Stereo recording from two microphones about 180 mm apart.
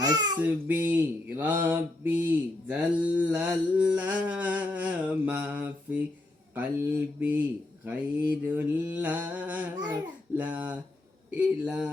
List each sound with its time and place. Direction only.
0.0 s child singing: 20° right (ahead or behind)
0.4 s mantra: 10° right (ahead or behind)
11.3 s speech: 5° right (ahead or behind)